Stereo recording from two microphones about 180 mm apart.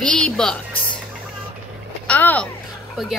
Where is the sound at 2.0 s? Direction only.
10° left (ahead or behind).